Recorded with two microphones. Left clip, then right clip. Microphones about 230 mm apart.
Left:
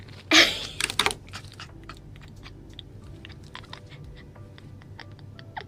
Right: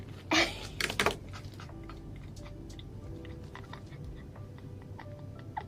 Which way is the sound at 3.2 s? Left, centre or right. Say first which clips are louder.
Left 4 dB; left.